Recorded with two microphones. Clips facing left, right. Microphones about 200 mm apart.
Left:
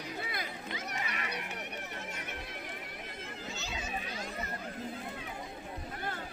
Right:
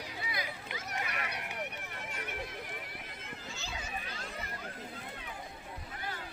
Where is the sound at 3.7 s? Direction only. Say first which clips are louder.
Left 2 dB; 20° left (ahead or behind).